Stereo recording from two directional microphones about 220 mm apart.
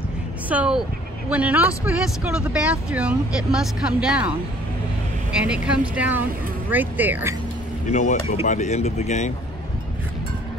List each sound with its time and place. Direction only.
0.5 s speech: 5° right (ahead or behind)
5.3 s speech: 5° right (ahead or behind)
7.9 s speech: 35° left (ahead or behind)